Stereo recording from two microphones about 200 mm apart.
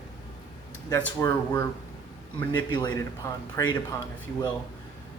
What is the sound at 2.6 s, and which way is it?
Speech, 20° left (ahead or behind).